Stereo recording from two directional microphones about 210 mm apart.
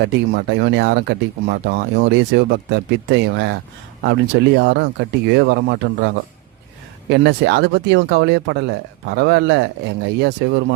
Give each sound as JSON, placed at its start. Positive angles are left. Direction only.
{"t": 0.0, "sound": "speech", "side_deg": -55}